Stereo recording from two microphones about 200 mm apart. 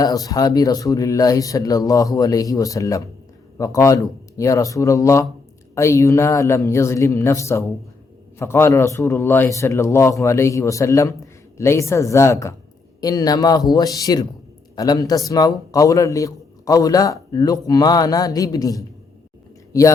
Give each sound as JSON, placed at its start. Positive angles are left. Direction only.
{"t": 0.0, "sound": "a man's voice", "side_deg": 15}